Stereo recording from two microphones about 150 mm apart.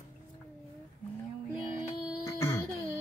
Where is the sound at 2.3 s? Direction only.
15° left (ahead or behind).